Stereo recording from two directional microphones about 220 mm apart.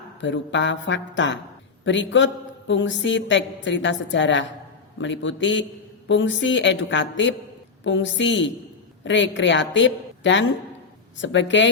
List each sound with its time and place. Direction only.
0.2 s a woman's voice: 55° left (ahead or behind)